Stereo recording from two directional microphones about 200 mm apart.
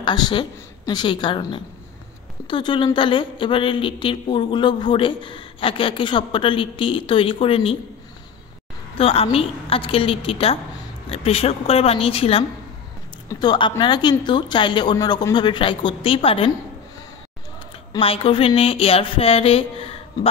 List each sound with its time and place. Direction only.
0.0 s a woman's voice: 20° left (ahead or behind)
8.9 s a woman's voice: 30° left (ahead or behind)
17.9 s a woman's voice: 30° left (ahead or behind)